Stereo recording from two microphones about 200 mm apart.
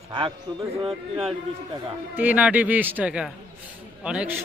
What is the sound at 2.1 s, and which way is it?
Speech, 10° right (ahead or behind).